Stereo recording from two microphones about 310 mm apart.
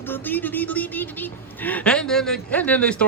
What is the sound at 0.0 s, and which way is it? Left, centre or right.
Speech, centre.